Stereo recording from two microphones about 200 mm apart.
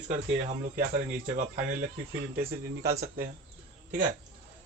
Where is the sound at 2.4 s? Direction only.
45° right (ahead or behind).